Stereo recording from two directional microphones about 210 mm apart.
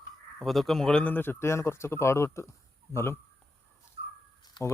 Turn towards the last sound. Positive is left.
turn(degrees=20)  # may be behind; listen again after turning